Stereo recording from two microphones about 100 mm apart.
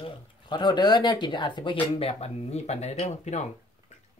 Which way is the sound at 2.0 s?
85° left.